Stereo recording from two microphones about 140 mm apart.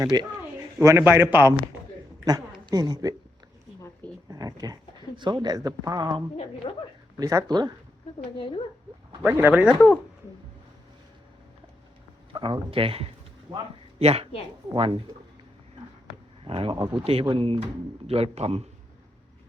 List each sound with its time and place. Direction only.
0.0 s speech: 30° right (ahead or behind)
0.8 s a man's voice: 20° right (ahead or behind)
2.2 s a woman's voice: 30° right (ahead or behind)
4.3 s speech: 25° right (ahead or behind)
6.6 s speech: 40° left (ahead or behind)
7.2 s speech: 25° right (ahead or behind)
8.4 s speech: 40° left (ahead or behind)
9.2 s a man's voice: 15° right (ahead or behind)
12.4 s a man's voice: 40° right (ahead or behind)
16.4 s speech: 40° right (ahead or behind)
16.7 s speech: 20° right (ahead or behind)
17.0 s a man's voice: 45° right (ahead or behind)